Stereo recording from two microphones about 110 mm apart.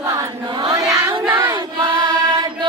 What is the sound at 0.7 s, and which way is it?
Child singing, 25° right (ahead or behind).